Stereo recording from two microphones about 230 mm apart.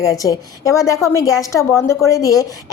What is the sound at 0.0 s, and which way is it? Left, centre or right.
A woman's voice, centre.